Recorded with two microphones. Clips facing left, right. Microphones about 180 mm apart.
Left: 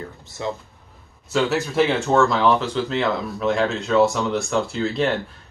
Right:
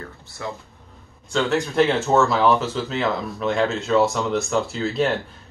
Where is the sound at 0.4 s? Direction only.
20° left (ahead or behind).